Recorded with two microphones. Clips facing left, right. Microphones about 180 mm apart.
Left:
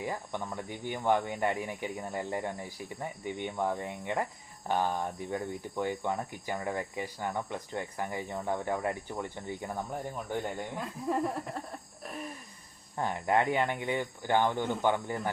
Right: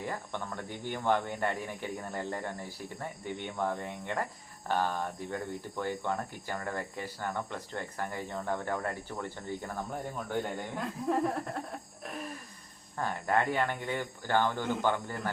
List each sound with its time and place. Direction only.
0.0 s speech: 10° left (ahead or behind)
10.8 s a sound: 5° left (ahead or behind)
13.0 s speech: 20° left (ahead or behind)